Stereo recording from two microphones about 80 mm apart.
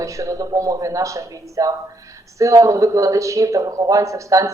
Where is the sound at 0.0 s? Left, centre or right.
Right.